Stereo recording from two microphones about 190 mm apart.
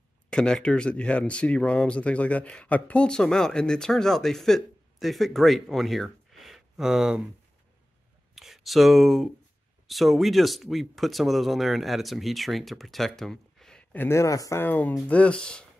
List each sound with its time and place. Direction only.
0.3 s speech: 5° left (ahead or behind)
8.4 s speech: centre (ahead or behind)